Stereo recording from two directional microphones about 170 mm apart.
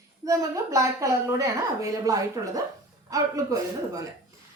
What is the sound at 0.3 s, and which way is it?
A woman's voice, 20° right (ahead or behind).